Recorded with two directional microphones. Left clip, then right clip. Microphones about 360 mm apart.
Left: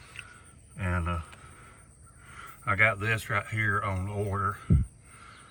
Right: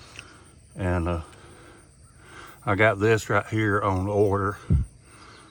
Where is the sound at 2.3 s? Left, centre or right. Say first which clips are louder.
Right 3 dB; centre.